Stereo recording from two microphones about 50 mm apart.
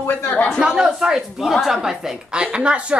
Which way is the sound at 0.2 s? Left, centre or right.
Left.